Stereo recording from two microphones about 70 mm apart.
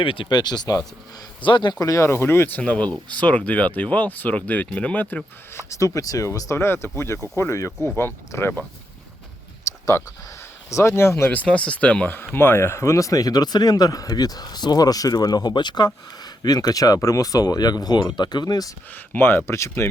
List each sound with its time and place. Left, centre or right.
0.3 s speech: left
1.8 s speech: left
2.0 s speech: left
2.6 s speech: centre
5.5 s speech: left
9.7 s a sound: left
10.7 s speech: left
11.3 s speech: left
18.9 s speech: left